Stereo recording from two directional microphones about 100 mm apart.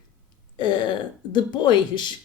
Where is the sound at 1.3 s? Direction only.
50° left (ahead or behind).